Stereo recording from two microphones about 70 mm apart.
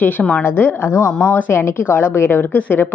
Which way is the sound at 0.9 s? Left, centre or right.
Left.